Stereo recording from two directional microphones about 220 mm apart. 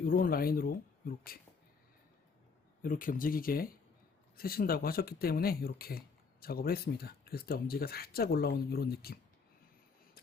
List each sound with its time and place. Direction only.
0.0 s speech: 40° left (ahead or behind)
2.8 s speech: 40° left (ahead or behind)